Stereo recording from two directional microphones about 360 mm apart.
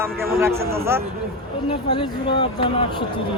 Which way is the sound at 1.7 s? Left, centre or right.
Centre.